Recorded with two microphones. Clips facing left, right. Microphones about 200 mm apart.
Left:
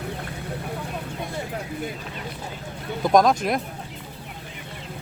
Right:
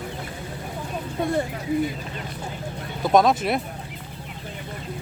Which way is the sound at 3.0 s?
5° right (ahead or behind).